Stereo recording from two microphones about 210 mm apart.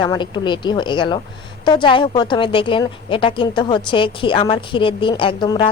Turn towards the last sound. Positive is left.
turn(degrees=20)  # may be behind; listen again after turning